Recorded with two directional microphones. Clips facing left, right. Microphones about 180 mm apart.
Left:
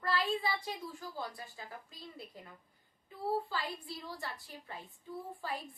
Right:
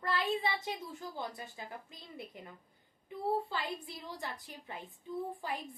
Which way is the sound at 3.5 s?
25° right (ahead or behind).